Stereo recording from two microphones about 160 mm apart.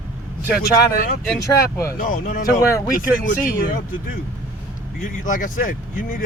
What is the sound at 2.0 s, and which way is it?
Speech, 60° left (ahead or behind).